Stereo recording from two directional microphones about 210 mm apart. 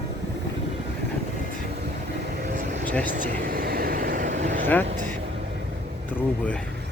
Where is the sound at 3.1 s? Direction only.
40° right (ahead or behind).